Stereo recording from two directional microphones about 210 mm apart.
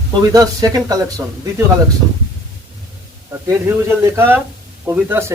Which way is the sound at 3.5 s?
10° right (ahead or behind).